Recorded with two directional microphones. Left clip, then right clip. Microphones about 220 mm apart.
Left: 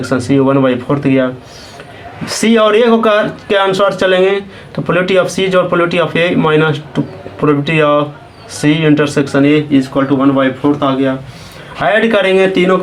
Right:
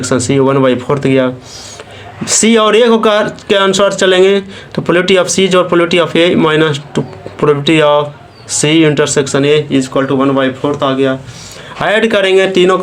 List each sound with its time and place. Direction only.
0.0 s speech: 40° right (ahead or behind)